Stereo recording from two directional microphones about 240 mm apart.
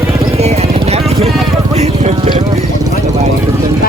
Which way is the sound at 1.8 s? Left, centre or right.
Right.